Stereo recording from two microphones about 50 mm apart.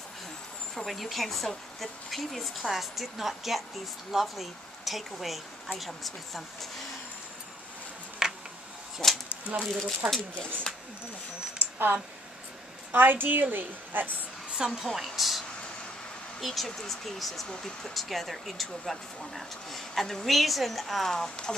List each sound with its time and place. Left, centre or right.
0.7 s speech: centre
8.2 s a sound: centre
9.0 s speech: centre
11.5 s a woman's voice: right
14.6 s a woman's voice: centre
15.0 s speech: centre
17.9 s speech: centre